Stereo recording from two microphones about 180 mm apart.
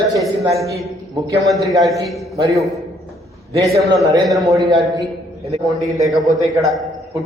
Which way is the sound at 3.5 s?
20° right (ahead or behind).